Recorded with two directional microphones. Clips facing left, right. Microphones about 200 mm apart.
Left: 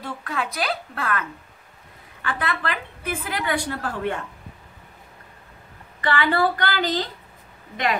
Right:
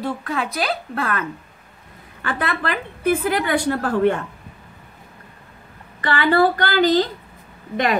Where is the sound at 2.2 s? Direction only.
50° right (ahead or behind).